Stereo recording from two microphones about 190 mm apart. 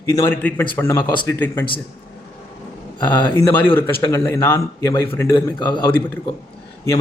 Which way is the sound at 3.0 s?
20° left (ahead or behind).